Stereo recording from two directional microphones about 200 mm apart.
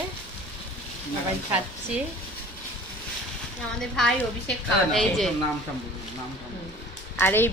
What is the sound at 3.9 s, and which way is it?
Speech, 5° left (ahead or behind).